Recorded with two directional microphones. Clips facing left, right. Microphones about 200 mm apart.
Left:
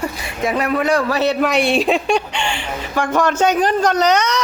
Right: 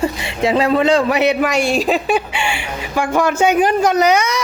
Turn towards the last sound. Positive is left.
turn(degrees=-10)  # may be behind; listen again after turning